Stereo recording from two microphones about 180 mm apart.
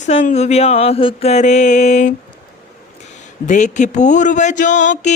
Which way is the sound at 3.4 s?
40° left (ahead or behind).